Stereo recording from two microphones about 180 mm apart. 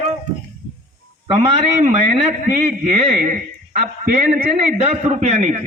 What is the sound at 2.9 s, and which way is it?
A man's voice, 40° right (ahead or behind).